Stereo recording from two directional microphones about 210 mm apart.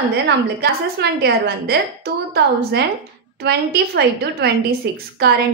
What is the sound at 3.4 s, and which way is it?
A woman's voice, 50° right (ahead or behind).